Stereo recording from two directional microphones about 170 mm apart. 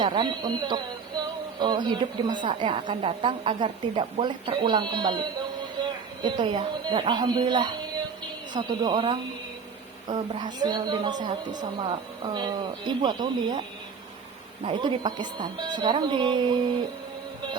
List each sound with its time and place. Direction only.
0.0 s a woman's voice: 25° right (ahead or behind)